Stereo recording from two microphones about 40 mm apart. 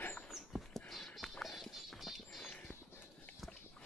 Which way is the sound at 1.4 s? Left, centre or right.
Centre.